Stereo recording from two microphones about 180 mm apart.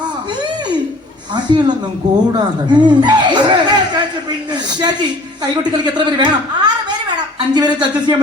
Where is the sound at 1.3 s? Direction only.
25° right (ahead or behind).